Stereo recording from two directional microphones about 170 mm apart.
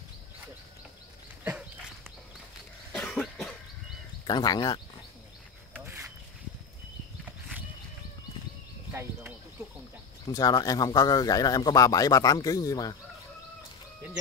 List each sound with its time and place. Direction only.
2.9 s cough: centre (ahead or behind)
4.3 s speech: 25° left (ahead or behind)
10.2 s speech: 20° left (ahead or behind)